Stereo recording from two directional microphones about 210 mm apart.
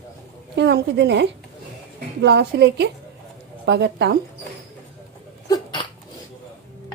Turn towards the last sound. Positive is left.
turn(degrees=20)  # may be behind; listen again after turning